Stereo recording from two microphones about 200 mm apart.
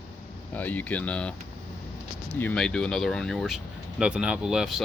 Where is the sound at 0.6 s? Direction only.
10° left (ahead or behind).